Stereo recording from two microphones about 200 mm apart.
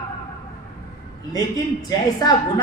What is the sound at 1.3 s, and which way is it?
A woman's voice, 20° left (ahead or behind).